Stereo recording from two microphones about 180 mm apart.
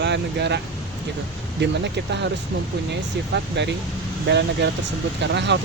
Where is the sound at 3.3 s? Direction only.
75° right (ahead or behind).